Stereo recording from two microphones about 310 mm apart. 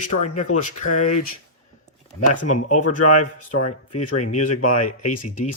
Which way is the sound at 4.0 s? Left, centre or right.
Left.